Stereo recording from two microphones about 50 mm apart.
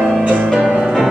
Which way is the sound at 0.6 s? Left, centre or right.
Centre.